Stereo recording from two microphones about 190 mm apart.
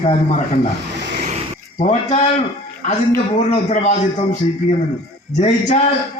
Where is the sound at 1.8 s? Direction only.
35° left (ahead or behind).